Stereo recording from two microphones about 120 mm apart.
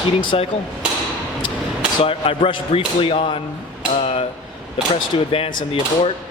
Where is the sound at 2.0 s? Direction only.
50° left (ahead or behind).